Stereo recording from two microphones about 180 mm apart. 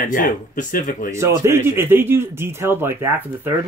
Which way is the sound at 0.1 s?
50° left (ahead or behind).